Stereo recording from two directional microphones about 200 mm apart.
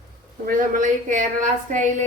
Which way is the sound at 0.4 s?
40° right (ahead or behind).